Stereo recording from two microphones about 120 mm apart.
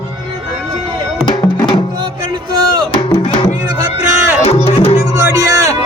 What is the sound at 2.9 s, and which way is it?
Music, 45° left (ahead or behind).